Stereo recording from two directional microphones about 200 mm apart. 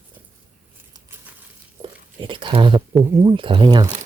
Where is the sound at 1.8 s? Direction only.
25° right (ahead or behind).